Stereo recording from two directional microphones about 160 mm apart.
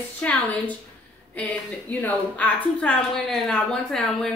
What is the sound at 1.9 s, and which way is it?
A woman's voice, 10° left (ahead or behind).